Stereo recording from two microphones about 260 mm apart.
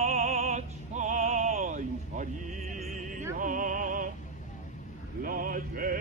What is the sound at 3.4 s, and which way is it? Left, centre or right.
Music, right.